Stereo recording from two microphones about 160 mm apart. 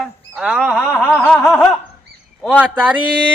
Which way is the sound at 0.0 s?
5° right (ahead or behind).